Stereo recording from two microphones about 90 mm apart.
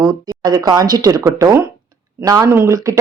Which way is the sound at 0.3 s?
45° right (ahead or behind).